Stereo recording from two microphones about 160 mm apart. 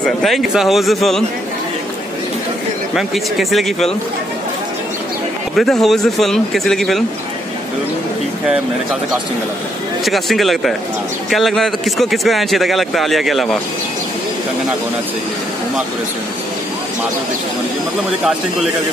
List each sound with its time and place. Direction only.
0.0 s a man's voice: centre (ahead or behind)
2.9 s a man's voice: centre (ahead or behind)
5.6 s a man's voice: centre (ahead or behind)
10.0 s a man's voice: centre (ahead or behind)